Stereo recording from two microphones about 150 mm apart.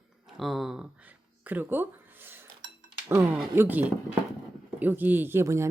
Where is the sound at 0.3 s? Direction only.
Centre (ahead or behind).